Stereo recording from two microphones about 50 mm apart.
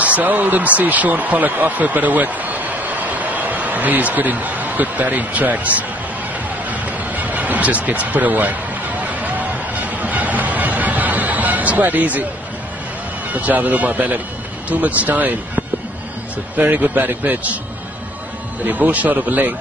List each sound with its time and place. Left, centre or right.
0.0 s speech: right
6.7 s a sound: right
9.0 s music: right
13.3 s speech: right
18.7 s speech: right